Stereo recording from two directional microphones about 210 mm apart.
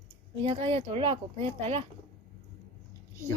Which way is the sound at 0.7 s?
25° right (ahead or behind).